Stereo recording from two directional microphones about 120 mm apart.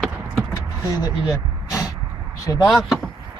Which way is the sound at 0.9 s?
25° left (ahead or behind).